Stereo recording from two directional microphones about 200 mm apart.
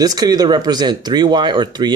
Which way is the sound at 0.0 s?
20° right (ahead or behind).